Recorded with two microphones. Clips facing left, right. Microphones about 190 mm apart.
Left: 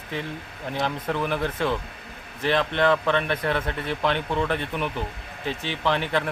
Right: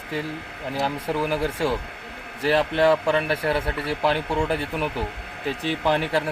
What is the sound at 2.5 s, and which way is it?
Speech, 35° right (ahead or behind).